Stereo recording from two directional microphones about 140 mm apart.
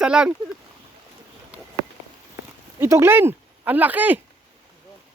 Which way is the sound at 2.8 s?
20° right (ahead or behind).